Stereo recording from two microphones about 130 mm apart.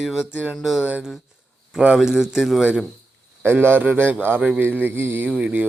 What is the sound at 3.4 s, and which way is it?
Speech, 15° right (ahead or behind).